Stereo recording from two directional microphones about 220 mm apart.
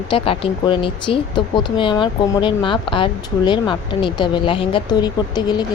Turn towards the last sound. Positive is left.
turn(degrees=20)  # may be behind; listen again after turning